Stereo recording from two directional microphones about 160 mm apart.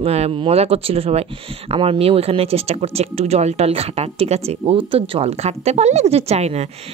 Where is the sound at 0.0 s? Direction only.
40° right (ahead or behind).